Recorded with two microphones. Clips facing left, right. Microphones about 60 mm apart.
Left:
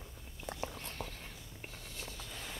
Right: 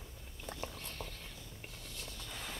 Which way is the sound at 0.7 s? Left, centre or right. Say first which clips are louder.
Left 2 dB; left.